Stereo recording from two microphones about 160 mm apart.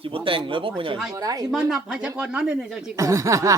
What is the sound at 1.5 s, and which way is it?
Speech, 5° right (ahead or behind).